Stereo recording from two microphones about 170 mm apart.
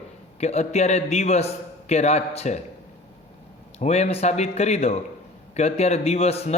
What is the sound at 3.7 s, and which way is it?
A man's voice, 40° left (ahead or behind).